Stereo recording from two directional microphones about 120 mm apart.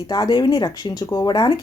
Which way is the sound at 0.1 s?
35° left (ahead or behind).